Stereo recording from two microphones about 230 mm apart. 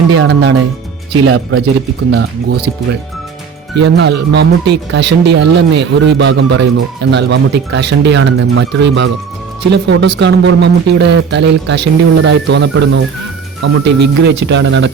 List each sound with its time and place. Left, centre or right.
0.2 s speech: right
3.8 s speech: right